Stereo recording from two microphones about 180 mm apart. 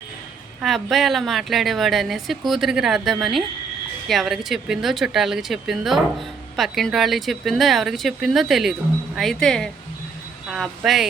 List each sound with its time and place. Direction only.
0.6 s speech: centre (ahead or behind)